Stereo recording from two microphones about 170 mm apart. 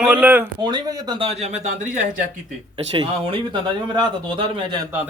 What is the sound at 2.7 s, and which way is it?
Speech, 30° right (ahead or behind).